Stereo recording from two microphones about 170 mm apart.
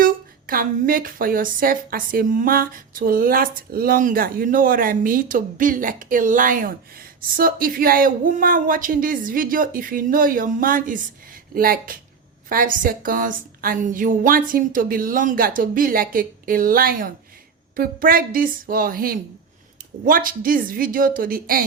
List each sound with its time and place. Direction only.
0.0 s speech: 55° right (ahead or behind)